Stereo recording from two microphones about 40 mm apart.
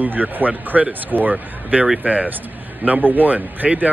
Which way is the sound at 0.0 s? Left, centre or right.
Right.